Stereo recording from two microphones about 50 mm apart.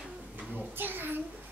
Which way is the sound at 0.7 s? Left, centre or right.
Right.